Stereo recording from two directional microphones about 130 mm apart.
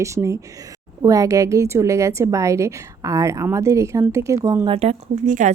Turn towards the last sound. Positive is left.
turn(degrees=-85)